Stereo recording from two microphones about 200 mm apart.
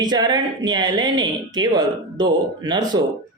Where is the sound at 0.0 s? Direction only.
20° right (ahead or behind).